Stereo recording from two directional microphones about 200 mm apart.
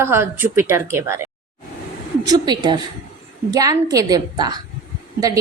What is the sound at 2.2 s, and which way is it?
A woman's voice, 20° right (ahead or behind).